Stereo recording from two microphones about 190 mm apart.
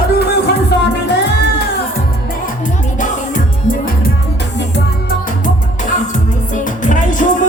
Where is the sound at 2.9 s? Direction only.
45° left (ahead or behind).